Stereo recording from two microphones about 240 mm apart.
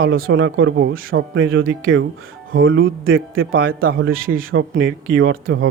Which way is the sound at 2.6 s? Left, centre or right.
Right.